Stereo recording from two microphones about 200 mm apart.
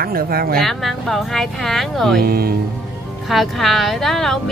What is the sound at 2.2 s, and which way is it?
Speech, 50° right (ahead or behind).